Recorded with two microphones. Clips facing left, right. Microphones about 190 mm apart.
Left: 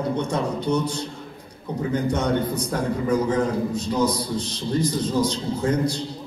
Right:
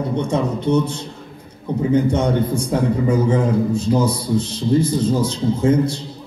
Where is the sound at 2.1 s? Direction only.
25° right (ahead or behind).